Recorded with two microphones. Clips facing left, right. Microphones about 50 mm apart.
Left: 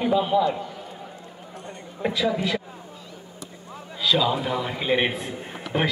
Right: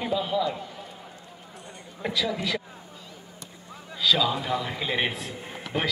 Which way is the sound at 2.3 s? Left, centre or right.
Left.